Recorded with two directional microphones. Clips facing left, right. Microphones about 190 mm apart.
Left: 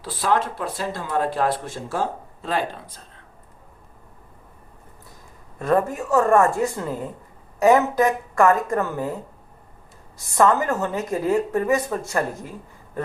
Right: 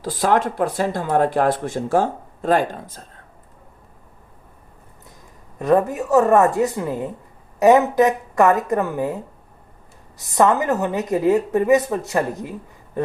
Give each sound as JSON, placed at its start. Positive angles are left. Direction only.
{"t": 0.0, "sound": "speech", "side_deg": -45}
{"t": 5.5, "sound": "a woman's voice", "side_deg": -15}
{"t": 10.2, "sound": "a woman's voice", "side_deg": -20}